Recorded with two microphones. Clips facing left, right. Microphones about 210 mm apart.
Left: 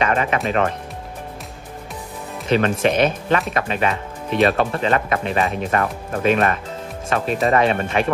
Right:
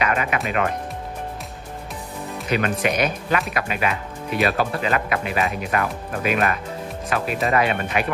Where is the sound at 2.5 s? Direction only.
30° left (ahead or behind).